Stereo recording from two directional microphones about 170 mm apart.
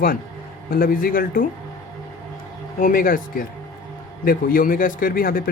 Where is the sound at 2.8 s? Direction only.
55° left (ahead or behind).